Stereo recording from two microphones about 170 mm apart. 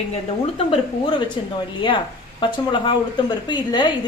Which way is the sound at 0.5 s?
30° left (ahead or behind).